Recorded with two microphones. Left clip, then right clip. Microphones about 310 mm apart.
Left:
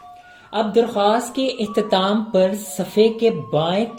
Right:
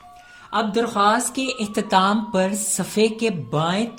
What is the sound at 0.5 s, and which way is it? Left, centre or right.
Speech, right.